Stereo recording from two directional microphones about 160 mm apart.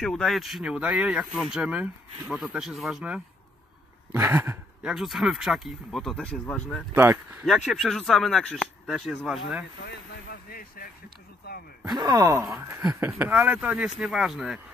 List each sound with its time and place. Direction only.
0.0 s speech: centre (ahead or behind); by 4.6 s 15° right (ahead or behind)
4.8 s speech: centre (ahead or behind)
9.8 s speech: 65° left (ahead or behind)
12.0 s speech: 25° right (ahead or behind); by 14.6 s centre (ahead or behind)